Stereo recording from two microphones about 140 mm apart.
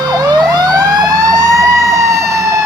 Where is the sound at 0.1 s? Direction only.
30° right (ahead or behind).